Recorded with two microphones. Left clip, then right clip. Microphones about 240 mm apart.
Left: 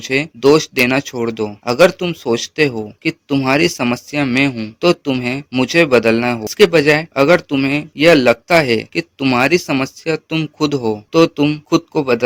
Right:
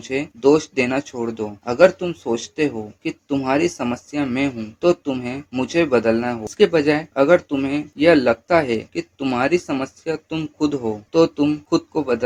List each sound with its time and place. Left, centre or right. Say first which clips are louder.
0.0 s speech: left 5 dB; left